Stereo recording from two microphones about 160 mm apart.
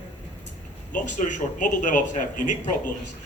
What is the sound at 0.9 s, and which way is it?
Speech, 50° left (ahead or behind).